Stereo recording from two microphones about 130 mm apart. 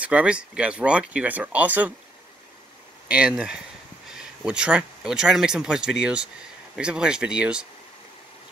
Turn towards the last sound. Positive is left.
turn(degrees=-10)  # may be behind; listen again after turning